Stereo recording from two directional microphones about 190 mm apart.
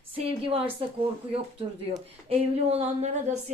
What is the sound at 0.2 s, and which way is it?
A woman's voice, 30° right (ahead or behind).